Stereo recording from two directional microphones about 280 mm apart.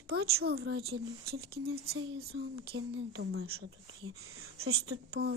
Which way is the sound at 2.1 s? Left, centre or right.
Right.